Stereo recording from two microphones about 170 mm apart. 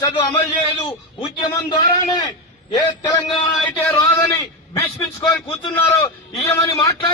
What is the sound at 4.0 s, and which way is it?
A man's voice, 20° left (ahead or behind).